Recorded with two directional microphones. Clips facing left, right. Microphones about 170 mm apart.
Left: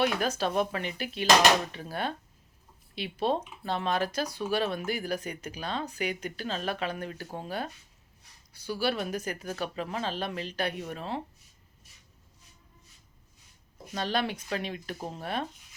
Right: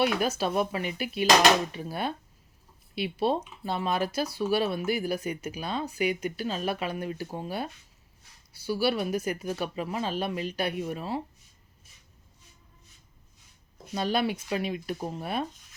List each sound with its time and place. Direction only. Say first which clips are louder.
0.0 s speech: right 2 dB; 10° right (ahead or behind)
13.9 s speech: right 3 dB; 10° right (ahead or behind)